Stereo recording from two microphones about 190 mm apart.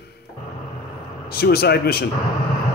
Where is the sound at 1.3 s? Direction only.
55° left (ahead or behind).